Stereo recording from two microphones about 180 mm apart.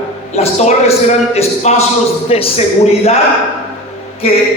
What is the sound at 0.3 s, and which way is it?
A man's voice, 35° left (ahead or behind).